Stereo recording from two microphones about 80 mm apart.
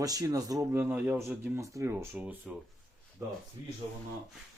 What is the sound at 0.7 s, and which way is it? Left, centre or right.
Speech, right.